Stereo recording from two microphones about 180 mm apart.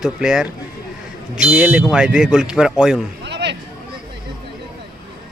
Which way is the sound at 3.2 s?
70° right (ahead or behind).